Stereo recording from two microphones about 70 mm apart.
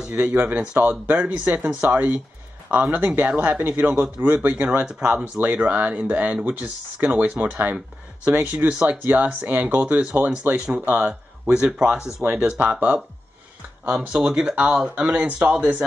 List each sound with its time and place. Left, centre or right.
0.0 s speech: centre
4.7 s speech: centre
5.4 s speech: right